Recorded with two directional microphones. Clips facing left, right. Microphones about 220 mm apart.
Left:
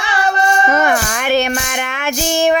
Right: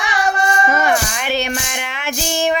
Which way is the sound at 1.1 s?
50° left (ahead or behind).